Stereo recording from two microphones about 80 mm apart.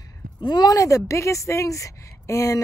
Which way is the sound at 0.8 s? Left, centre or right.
Left.